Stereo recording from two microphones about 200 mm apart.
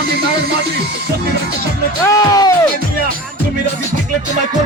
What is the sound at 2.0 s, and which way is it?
Music, 20° left (ahead or behind).